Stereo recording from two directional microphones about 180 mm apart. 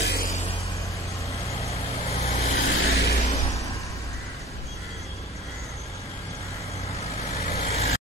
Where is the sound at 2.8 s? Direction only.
60° left (ahead or behind).